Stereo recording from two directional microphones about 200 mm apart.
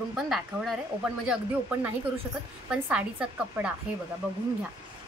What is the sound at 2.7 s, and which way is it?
Speech, 5° right (ahead or behind).